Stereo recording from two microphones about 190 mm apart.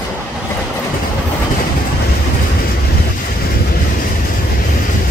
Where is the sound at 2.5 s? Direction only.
55° left (ahead or behind).